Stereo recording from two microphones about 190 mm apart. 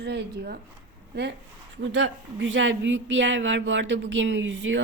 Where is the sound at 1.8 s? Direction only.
85° right.